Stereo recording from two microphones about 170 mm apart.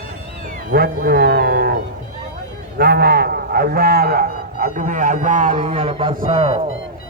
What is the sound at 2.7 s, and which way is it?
A man's voice, 65° right (ahead or behind).